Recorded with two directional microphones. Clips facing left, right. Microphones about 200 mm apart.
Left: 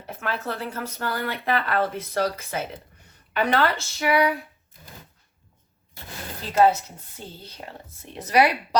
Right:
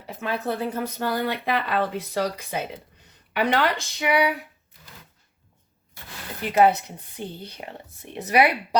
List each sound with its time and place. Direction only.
0.2 s speech: 15° right (ahead or behind)
6.4 s speech: 15° right (ahead or behind)